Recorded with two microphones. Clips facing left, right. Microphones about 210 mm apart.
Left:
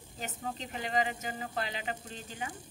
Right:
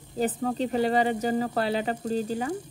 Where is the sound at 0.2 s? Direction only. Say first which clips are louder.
Right 14 dB; 40° right (ahead or behind).